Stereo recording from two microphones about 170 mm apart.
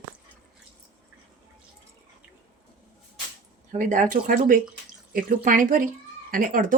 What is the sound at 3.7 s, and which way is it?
A woman's voice, 50° right (ahead or behind).